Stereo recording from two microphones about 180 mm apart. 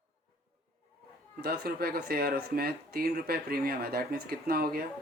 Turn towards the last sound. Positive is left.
turn(degrees=-55)  # may be behind; listen again after turning